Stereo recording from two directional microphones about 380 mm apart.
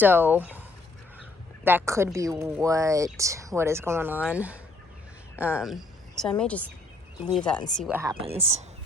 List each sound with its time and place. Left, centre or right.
0.0 s speech: centre
1.6 s a woman's voice: centre